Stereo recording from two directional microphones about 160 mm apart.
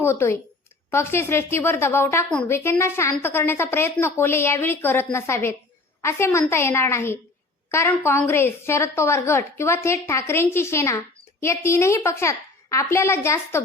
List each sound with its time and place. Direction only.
0.0 s a woman's voice: 15° left (ahead or behind)